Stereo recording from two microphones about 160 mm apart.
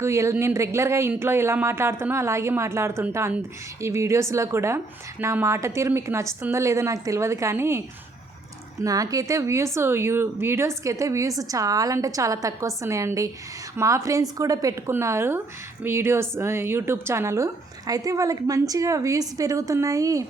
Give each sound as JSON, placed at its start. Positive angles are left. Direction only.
{"t": 0.0, "sound": "speech", "side_deg": -20}
{"t": 8.8, "sound": "a woman's voice", "side_deg": -20}